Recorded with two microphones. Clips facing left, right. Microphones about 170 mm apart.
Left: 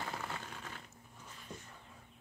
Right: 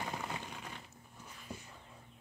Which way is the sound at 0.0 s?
15° right (ahead or behind).